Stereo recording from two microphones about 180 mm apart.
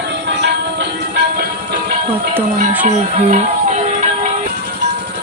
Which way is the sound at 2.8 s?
35° right (ahead or behind).